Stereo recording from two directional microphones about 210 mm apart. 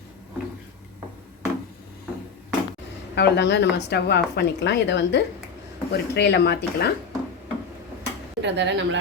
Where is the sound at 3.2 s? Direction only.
55° left (ahead or behind).